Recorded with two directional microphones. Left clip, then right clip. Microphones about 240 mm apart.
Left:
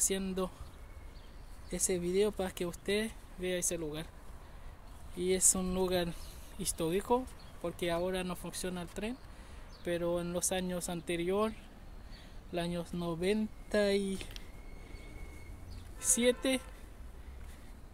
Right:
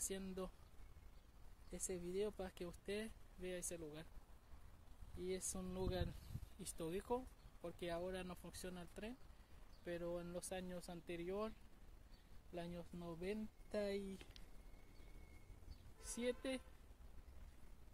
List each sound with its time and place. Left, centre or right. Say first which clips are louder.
0.0 s speech: left 14 dB; centre
1.7 s speech: left 15 dB; centre
5.2 s speech: left 16 dB; centre
12.5 s speech: left 15 dB; centre
16.2 s speech: left 14 dB; centre